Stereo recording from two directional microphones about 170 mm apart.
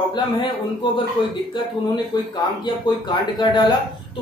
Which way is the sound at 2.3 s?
25° left (ahead or behind).